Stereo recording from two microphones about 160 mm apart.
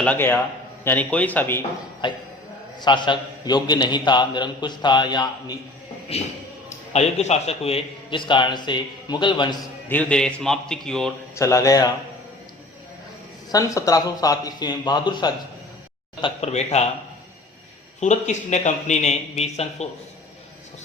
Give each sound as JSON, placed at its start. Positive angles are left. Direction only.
{"t": 0.0, "sound": "speech", "side_deg": 10}
{"t": 2.0, "sound": "a man's voice", "side_deg": 30}
{"t": 6.1, "sound": "a man's voice", "side_deg": 40}
{"t": 9.9, "sound": "a man's voice", "side_deg": 5}
{"t": 11.3, "sound": "a man's voice", "side_deg": 20}
{"t": 13.5, "sound": "a man's voice", "side_deg": 20}
{"t": 16.2, "sound": "a man's voice", "side_deg": 40}
{"t": 18.0, "sound": "a man's voice", "side_deg": 45}